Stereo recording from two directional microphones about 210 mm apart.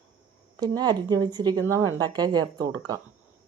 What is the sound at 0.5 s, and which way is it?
Speech, 20° right (ahead or behind).